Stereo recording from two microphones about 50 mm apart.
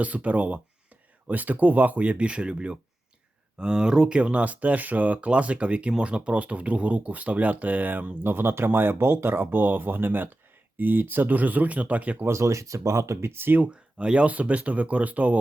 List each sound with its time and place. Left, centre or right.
0.0 s speech: right
12.3 s speech: right
13.3 s speech: right
13.6 s speech: right